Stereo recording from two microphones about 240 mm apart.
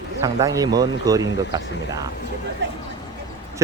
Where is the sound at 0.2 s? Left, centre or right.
Centre.